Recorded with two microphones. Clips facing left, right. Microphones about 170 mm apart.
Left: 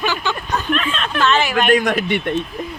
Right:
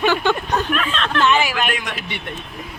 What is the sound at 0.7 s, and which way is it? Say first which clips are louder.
Speech: left 1 dB; centre (ahead or behind).